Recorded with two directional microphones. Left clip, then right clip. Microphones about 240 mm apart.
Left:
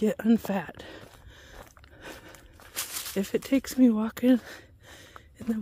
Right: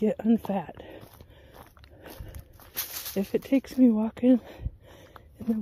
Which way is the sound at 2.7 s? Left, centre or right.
Right.